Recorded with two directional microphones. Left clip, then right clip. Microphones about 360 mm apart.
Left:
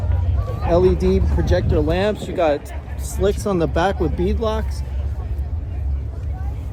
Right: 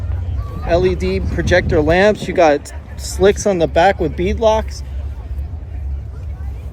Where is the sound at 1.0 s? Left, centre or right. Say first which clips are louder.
Right 1 dB; centre.